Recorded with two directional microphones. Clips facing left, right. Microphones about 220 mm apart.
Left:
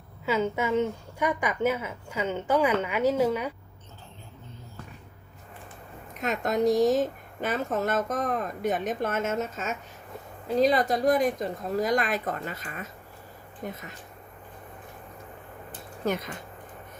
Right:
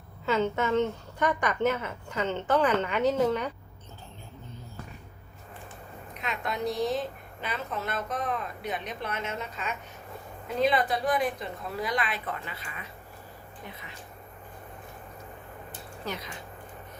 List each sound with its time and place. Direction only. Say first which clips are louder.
0.3 s a woman's voice: even; 10° left (ahead or behind)
6.1 s speech: left 7 dB; 45° left (ahead or behind)
16.0 s speech: left 8 dB; 50° left (ahead or behind)